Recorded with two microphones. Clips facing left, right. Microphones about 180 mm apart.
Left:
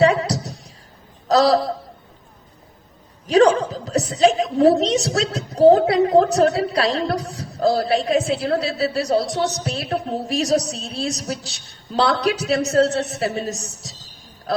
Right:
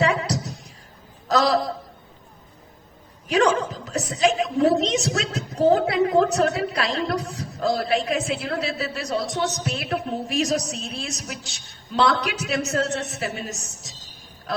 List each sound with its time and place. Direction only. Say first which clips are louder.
0.0 s a sound: left 6 dB; 35° left (ahead or behind)
1.3 s a woman's voice: left 5 dB; 35° left (ahead or behind)
3.2 s a woman's voice: left 5 dB; 35° left (ahead or behind)
5.5 s child singing: left 6 dB; 35° left (ahead or behind)
5.9 s a woman's voice: left 4 dB; 35° left (ahead or behind)